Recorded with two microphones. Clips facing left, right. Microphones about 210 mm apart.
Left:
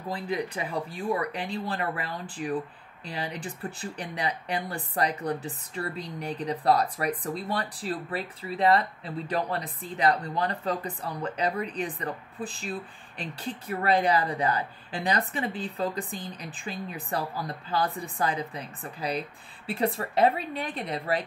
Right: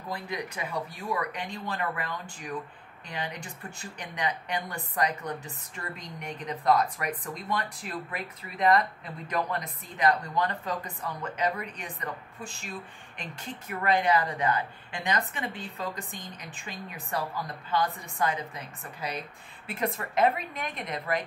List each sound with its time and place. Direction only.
0.1 s speech: 30° left (ahead or behind)